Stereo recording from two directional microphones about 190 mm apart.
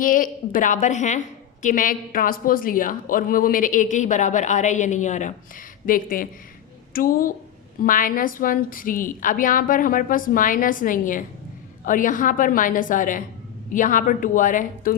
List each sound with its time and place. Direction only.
0.0 s a woman's voice: 45° left (ahead or behind)